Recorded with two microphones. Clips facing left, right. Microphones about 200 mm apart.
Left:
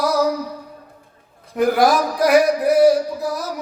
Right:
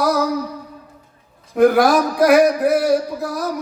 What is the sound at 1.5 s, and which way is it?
Speech, 60° right (ahead or behind).